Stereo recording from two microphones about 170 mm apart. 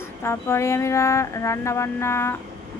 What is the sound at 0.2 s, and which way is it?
Speech, 15° left (ahead or behind).